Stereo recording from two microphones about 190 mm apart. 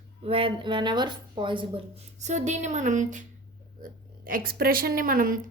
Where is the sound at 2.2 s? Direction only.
40° right (ahead or behind).